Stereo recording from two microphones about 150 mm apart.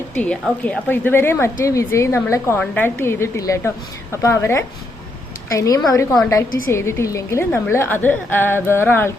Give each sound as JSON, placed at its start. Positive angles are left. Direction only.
{"t": 0.2, "sound": "a woman's voice", "side_deg": 10}